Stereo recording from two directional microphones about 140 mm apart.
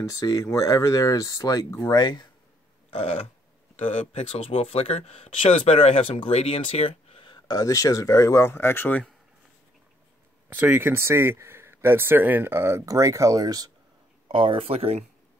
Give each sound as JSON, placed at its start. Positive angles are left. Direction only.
{"t": 0.1, "sound": "speech", "side_deg": 25}
{"t": 2.9, "sound": "burping", "side_deg": 45}
{"t": 3.7, "sound": "speech", "side_deg": 45}
{"t": 10.5, "sound": "speech", "side_deg": -15}
{"t": 14.2, "sound": "speech", "side_deg": -40}